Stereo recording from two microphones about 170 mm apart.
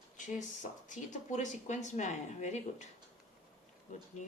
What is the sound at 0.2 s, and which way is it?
Speech, 45° left (ahead or behind).